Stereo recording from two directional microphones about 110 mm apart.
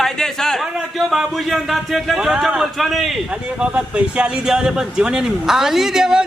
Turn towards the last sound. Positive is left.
turn(degrees=-5)  # may be behind; listen again after turning